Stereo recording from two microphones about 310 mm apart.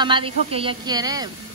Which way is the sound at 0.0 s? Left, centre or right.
Centre.